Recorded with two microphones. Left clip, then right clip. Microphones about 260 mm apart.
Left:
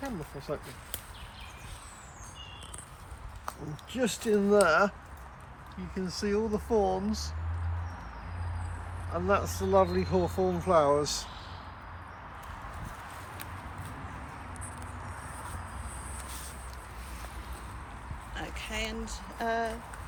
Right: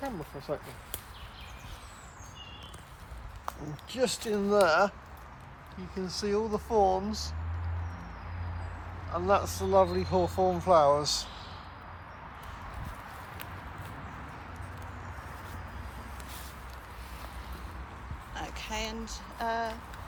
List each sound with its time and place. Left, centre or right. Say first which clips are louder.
0.0 s a sound: right 1 dB; right
3.9 s speech: left 1 dB; right
9.4 s speech: even; right
9.6 s speech: even; centre
10.2 s speech: right 2 dB; right
10.7 s speech: right 2 dB; centre
11.0 s speech: right 2 dB; right
18.3 s a sound: even; centre